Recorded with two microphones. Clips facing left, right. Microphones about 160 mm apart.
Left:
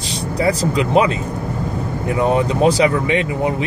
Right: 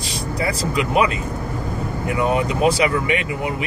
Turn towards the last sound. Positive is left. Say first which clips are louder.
# left 4 dB
turn(degrees=30)  # may be behind; listen again after turning